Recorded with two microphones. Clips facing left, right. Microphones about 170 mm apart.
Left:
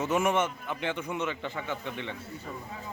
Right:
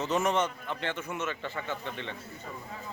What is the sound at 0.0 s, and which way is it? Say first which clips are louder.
A man's voice: left 1 dB; 10° left (ahead or behind).